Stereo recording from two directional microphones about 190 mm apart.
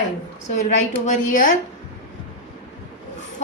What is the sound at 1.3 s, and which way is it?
Speech, 45° left (ahead or behind).